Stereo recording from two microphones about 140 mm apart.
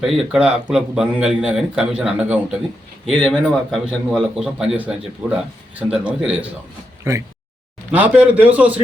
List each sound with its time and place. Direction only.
0.0 s a man's voice: 5° right (ahead or behind)
7.1 s a man's voice: 20° right (ahead or behind)